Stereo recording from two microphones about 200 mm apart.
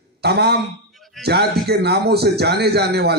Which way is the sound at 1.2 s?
55° right (ahead or behind).